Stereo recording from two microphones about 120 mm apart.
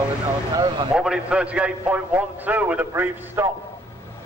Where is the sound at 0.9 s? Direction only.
10° right (ahead or behind).